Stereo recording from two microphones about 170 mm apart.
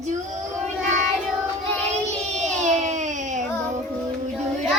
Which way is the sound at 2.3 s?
45° right (ahead or behind).